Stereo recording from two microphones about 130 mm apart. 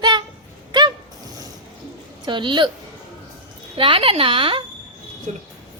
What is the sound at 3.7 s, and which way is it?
Speech, 40° right (ahead or behind).